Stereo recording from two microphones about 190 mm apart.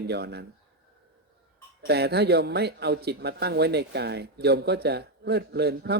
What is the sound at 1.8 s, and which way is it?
Speech, 60° right (ahead or behind).